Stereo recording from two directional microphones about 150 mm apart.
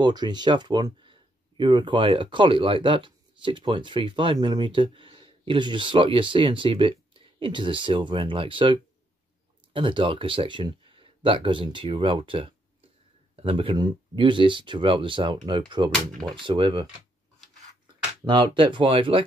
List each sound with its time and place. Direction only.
0.0 s speech: 30° right (ahead or behind)
15.9 s speech: 5° left (ahead or behind)
16.3 s speech: 35° right (ahead or behind)
18.2 s speech: 30° right (ahead or behind)